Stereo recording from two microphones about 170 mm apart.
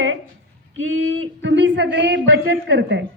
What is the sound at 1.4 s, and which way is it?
Speech, 90° right.